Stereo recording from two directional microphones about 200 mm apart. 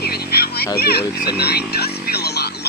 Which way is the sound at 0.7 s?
50° left (ahead or behind).